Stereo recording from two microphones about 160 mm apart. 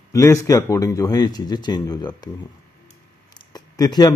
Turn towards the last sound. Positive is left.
turn(degrees=25)  # may be behind; listen again after turning